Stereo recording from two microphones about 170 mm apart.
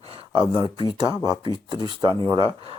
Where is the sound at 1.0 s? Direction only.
25° right (ahead or behind).